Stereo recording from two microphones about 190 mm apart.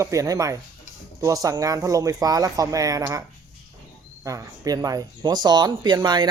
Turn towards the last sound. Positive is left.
turn(degrees=-20)  # may be behind; listen again after turning